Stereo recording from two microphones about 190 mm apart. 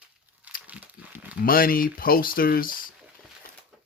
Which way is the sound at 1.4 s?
50° left (ahead or behind).